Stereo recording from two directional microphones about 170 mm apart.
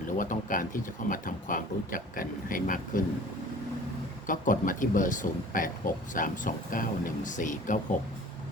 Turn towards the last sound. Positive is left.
turn(degrees=50)  # may be behind; listen again after turning